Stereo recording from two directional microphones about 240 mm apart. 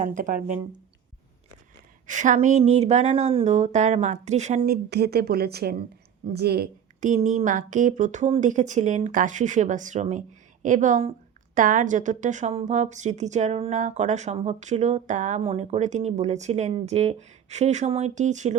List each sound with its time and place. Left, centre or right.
0.0 s a woman's voice: right
2.0 s a woman's voice: right